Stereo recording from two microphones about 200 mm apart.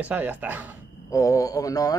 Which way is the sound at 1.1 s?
15° left (ahead or behind).